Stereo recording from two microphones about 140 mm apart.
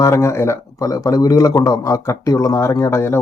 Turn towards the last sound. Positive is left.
turn(degrees=20)  # may be behind; listen again after turning